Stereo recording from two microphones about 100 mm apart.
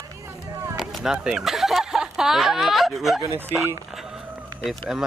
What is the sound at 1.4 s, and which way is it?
Speech, centre (ahead or behind).